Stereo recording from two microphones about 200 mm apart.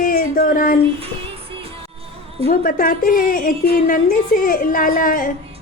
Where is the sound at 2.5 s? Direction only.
45° left (ahead or behind).